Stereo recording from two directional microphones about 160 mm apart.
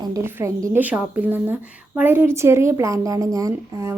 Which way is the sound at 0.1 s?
15° right (ahead or behind).